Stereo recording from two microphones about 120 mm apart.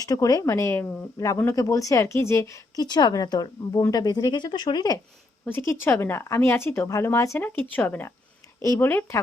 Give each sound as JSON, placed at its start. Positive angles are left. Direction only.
{"t": 0.0, "sound": "a woman's voice", "side_deg": 30}
{"t": 2.8, "sound": "speech", "side_deg": 35}
{"t": 5.5, "sound": "a woman's voice", "side_deg": 20}